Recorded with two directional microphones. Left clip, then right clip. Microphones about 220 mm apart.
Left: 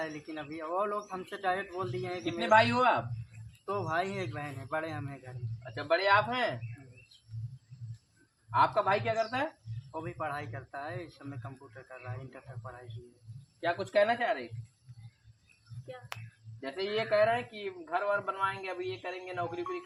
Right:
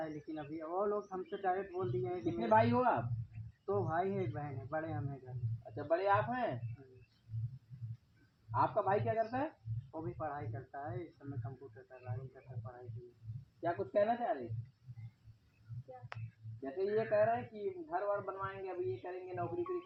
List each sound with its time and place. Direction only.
0.0 s speech: 35° left (ahead or behind)
2.4 s a man's voice: 25° left (ahead or behind)
8.5 s a man's voice: 30° left (ahead or behind)
13.6 s a man's voice: 30° left (ahead or behind)
16.1 s finger snapping: 20° left (ahead or behind)
17.0 s a man's voice: 35° left (ahead or behind)